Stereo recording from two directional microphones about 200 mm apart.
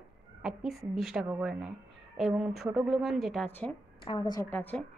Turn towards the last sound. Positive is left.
turn(degrees=10)  # may be behind; listen again after turning